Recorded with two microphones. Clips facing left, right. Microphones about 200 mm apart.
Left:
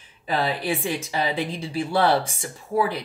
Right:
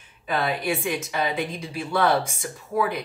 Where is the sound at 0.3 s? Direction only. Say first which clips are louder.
Left 1 dB; 30° left (ahead or behind).